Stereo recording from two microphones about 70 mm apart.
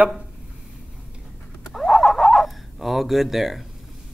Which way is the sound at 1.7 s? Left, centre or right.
Centre.